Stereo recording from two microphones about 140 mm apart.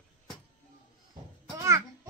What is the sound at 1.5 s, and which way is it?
Speech, 20° right (ahead or behind).